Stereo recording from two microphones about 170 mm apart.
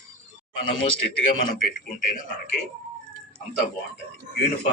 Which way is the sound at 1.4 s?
50° left (ahead or behind).